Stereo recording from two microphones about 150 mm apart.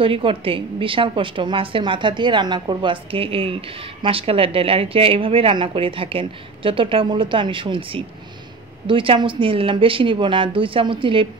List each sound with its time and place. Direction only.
0.0 s a woman's voice: 35° right (ahead or behind)